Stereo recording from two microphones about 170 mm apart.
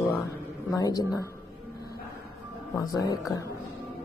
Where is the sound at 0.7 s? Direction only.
20° left (ahead or behind).